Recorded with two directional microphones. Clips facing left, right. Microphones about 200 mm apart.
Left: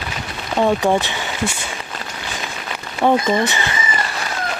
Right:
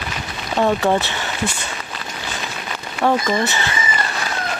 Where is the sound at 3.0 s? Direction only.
15° left (ahead or behind).